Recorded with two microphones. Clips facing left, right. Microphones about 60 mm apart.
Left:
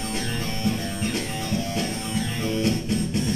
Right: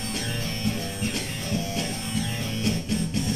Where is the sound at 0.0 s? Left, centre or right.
Left.